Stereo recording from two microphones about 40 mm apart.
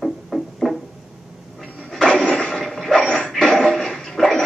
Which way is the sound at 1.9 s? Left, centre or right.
Centre.